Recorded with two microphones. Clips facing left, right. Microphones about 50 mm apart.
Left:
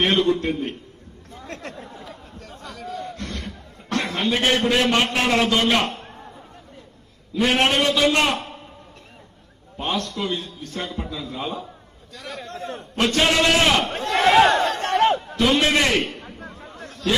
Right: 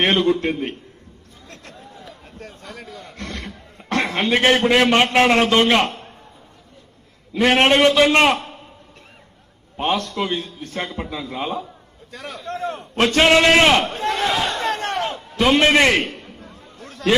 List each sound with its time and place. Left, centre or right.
0.0 s a man's voice: right
1.5 s chatter: left
2.3 s a sound: right
5.1 s a man's voice: right
7.3 s a man's voice: right
9.8 s a man's voice: right
14.1 s speech: left
14.7 s speech: right
15.0 s a sound: left
15.5 s a man's voice: right
16.2 s a sound: left